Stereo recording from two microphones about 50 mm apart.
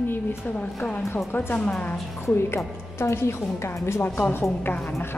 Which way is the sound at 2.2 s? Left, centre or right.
Left.